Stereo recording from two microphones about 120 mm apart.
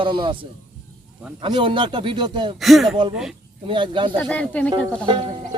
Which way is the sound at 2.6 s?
Centre (ahead or behind).